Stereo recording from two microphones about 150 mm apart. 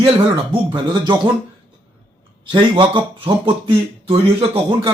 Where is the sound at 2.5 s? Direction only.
30° right (ahead or behind).